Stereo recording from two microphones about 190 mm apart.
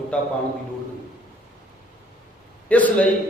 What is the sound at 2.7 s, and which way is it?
Speech, 5° left (ahead or behind).